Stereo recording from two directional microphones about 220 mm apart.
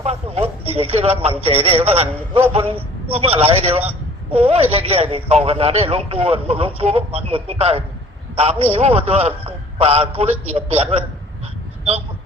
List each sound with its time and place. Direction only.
0.0 s a man's voice: 30° right (ahead or behind)